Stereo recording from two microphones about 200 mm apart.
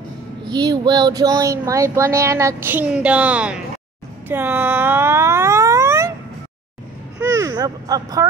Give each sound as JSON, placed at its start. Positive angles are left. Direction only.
{"t": 0.5, "sound": "speech", "side_deg": -20}
{"t": 4.3, "sound": "a sound", "side_deg": -10}
{"t": 7.2, "sound": "speech", "side_deg": -15}